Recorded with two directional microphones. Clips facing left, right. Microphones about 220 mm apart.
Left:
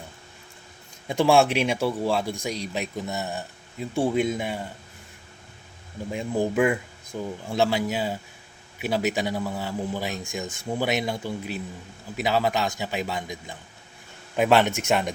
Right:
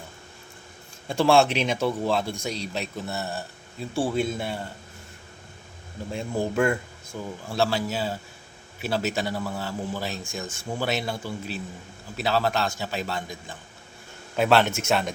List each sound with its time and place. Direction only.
1.0 s speech: 15° left (ahead or behind)
6.1 s speech: 15° left (ahead or behind)